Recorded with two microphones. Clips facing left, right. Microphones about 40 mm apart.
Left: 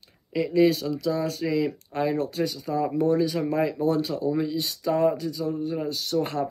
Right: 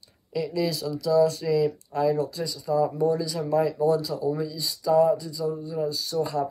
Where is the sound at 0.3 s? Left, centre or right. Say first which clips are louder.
Left 6 dB; left.